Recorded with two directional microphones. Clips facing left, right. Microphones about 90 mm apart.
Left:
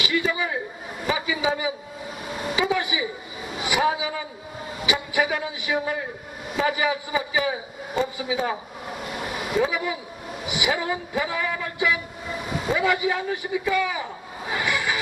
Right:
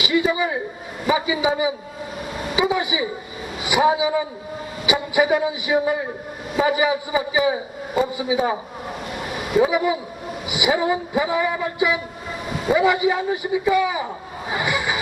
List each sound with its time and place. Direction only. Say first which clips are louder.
0.0 s a sound: right 5 dB; 15° right (ahead or behind)
1.0 s a man's voice: right 5 dB; 15° right (ahead or behind)
9.6 s a man's voice: right 7 dB; 10° right (ahead or behind)
14.5 s vehicle: right 2 dB; 15° right (ahead or behind)